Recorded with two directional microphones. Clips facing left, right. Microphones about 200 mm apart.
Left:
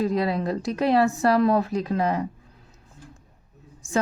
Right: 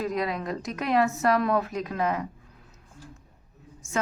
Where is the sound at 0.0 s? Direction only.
30° left (ahead or behind).